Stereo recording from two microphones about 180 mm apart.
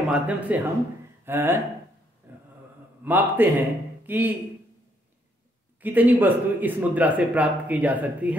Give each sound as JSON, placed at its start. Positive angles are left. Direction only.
{"t": 0.1, "sound": "speech", "side_deg": -10}
{"t": 2.3, "sound": "a sound", "side_deg": -10}
{"t": 3.0, "sound": "a man's voice", "side_deg": -10}
{"t": 5.8, "sound": "speech", "side_deg": -10}